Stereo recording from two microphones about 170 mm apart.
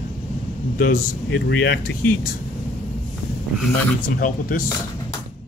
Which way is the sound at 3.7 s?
55° left (ahead or behind).